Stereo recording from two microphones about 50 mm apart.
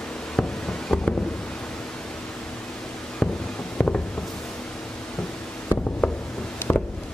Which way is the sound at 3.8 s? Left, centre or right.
Left.